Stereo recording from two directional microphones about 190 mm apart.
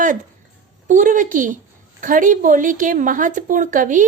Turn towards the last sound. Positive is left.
turn(degrees=-45)  # may be behind; listen again after turning